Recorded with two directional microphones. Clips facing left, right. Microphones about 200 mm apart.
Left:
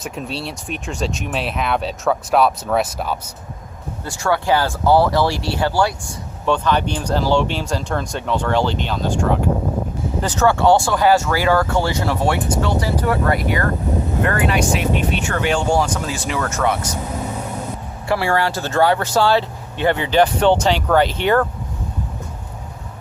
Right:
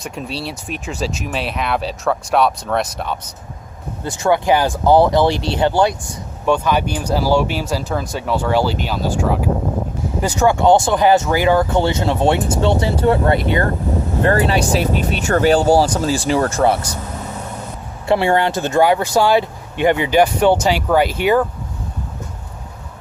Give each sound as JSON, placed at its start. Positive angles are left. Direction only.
{"t": 0.0, "sound": "speech", "side_deg": 0}
{"t": 4.0, "sound": "speech", "side_deg": -20}
{"t": 6.4, "sound": "speech", "side_deg": -10}
{"t": 18.1, "sound": "speech", "side_deg": -20}